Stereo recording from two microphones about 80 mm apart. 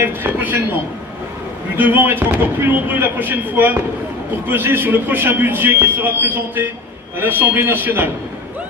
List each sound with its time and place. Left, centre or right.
0.0 s a man's voice: right
1.8 s a man's voice: right